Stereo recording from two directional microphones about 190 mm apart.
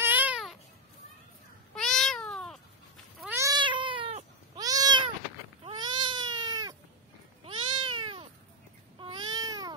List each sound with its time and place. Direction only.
0.0 s babbling: 10° right (ahead or behind)
1.8 s cat: centre (ahead or behind)
3.3 s cat: 20° right (ahead or behind)
4.6 s cat: 20° right (ahead or behind)
9.0 s babbling: 25° right (ahead or behind)